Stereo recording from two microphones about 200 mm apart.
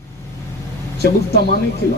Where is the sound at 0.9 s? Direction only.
50° left (ahead or behind).